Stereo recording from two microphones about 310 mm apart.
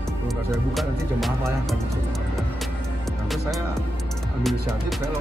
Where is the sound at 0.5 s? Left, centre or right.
Centre.